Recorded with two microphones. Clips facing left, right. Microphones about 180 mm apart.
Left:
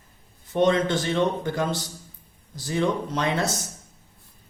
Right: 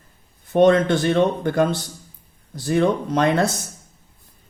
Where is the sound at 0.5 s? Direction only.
55° right (ahead or behind).